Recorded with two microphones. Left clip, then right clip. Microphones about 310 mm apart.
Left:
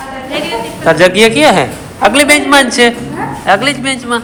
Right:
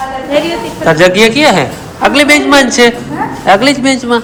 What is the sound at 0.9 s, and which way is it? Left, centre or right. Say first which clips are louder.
A man's voice: even; centre.